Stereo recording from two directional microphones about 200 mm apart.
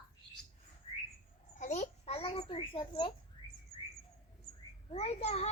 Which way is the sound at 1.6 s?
35° left (ahead or behind).